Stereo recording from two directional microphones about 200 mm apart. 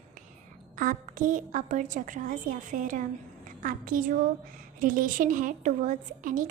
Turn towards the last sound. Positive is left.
turn(degrees=-40)  # may be behind; listen again after turning